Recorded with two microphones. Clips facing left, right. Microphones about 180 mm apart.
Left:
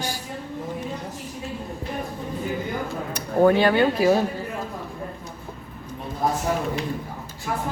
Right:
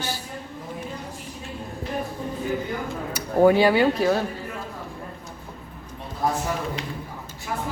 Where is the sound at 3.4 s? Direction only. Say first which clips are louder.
Right 1 dB; 10° right (ahead or behind).